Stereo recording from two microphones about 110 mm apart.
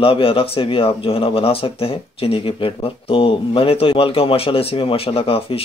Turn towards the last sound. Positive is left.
turn(degrees=60)  # may be behind; listen again after turning